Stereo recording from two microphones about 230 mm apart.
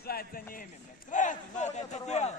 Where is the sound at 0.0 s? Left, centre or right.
Left.